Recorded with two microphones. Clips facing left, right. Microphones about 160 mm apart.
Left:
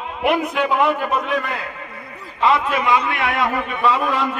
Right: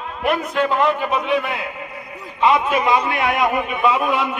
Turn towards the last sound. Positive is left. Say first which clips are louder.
# right 1 dB
turn(degrees=-10)  # may be behind; listen again after turning